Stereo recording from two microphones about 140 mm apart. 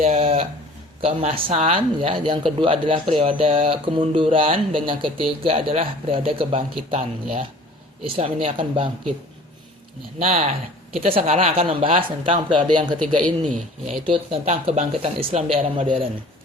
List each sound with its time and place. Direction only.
0.2 s a sound: 40° right (ahead or behind)
1.0 s speech: 45° right (ahead or behind)
10.9 s speech: 45° right (ahead or behind)
13.0 s a man's voice: 5° left (ahead or behind)
13.5 s speech: 65° right (ahead or behind)
14.0 s speech: 40° right (ahead or behind)